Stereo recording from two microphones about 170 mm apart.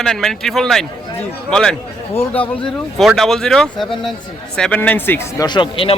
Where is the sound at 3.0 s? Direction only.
Centre (ahead or behind).